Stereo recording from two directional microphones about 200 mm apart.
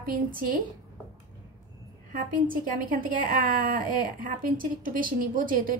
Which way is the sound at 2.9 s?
45° right (ahead or behind).